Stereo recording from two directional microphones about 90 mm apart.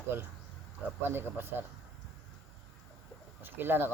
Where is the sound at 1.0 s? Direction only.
25° right (ahead or behind).